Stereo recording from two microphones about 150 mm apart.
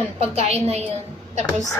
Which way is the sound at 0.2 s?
45° right (ahead or behind).